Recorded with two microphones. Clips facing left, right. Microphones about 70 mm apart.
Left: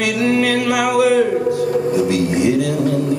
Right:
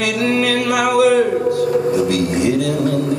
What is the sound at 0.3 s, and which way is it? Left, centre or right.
Music, left.